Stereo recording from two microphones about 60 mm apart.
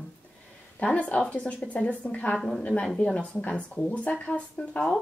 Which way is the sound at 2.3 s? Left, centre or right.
Centre.